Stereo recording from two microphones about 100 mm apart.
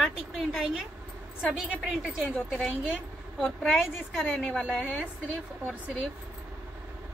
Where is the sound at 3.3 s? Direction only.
Centre (ahead or behind).